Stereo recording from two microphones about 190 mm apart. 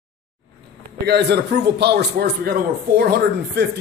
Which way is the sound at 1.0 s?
60° right (ahead or behind).